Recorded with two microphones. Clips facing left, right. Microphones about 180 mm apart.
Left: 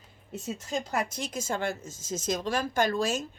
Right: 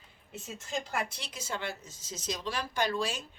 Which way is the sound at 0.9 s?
45° left (ahead or behind).